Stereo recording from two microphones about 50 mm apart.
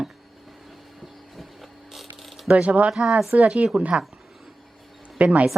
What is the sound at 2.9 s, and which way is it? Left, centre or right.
Speech, centre.